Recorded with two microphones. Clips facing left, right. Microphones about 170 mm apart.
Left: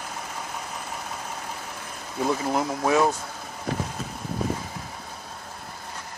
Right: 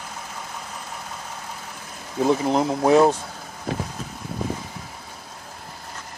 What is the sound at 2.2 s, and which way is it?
Speech, 25° right (ahead or behind).